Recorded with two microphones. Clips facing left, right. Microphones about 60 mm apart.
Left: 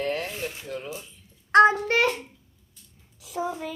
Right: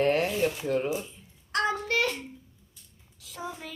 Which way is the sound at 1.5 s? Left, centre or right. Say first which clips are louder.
Left 9 dB; left.